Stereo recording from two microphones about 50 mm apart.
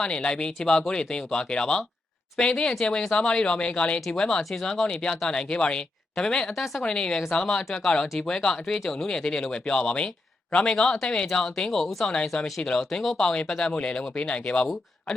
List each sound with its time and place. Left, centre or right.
0.0 s speech: centre
4.0 s speech: centre
6.5 s speech: centre
6.8 s speech: centre
11.3 s speech: centre
13.5 s speech: centre